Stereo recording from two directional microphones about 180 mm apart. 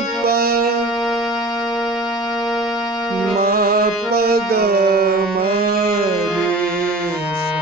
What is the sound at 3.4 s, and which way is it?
Music, 55° right (ahead or behind).